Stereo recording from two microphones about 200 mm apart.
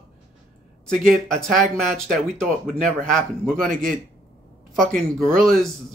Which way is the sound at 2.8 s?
Centre (ahead or behind).